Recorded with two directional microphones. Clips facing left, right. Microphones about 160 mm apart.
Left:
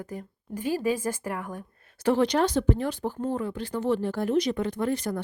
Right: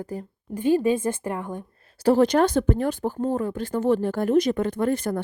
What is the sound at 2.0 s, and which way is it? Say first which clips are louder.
Speech: right 5 dB; 40° right (ahead or behind).